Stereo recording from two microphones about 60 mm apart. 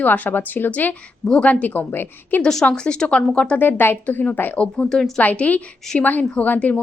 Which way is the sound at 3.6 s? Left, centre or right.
Left.